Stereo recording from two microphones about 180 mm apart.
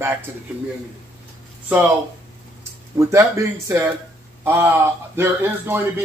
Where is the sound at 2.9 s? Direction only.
15° right (ahead or behind).